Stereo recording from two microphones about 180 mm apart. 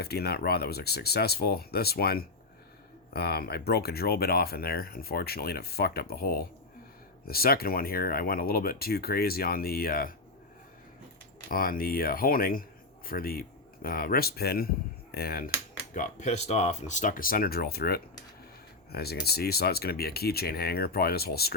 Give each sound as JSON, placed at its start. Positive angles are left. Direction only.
{"t": 0.0, "sound": "speech", "side_deg": 60}
{"t": 11.4, "sound": "speech", "side_deg": 50}
{"t": 16.0, "sound": "speech", "side_deg": 40}